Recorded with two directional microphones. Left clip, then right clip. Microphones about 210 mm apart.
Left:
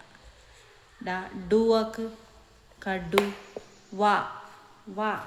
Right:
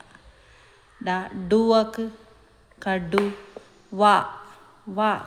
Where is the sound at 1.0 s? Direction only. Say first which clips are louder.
Right 6 dB; 35° right (ahead or behind).